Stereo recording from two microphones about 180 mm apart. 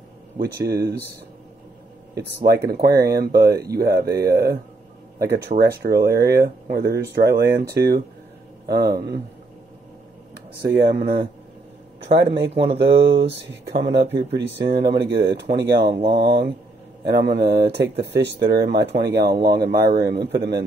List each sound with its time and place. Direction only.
0.4 s speech: 60° right (ahead or behind)
2.4 s speech: 60° right (ahead or behind)
10.8 s speech: 60° right (ahead or behind)
12.1 s speech: 70° right (ahead or behind)
14.6 s speech: 25° right (ahead or behind)
14.9 s speech: 65° right (ahead or behind)